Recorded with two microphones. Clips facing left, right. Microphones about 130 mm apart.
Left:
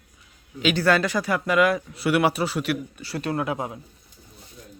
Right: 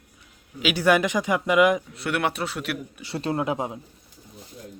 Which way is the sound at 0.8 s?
15° right (ahead or behind).